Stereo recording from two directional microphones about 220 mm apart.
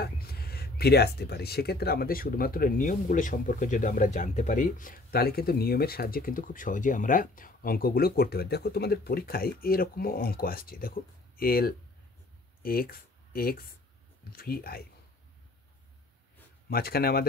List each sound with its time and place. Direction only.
0.0 s speech: 45° left (ahead or behind)
16.6 s speech: 45° left (ahead or behind)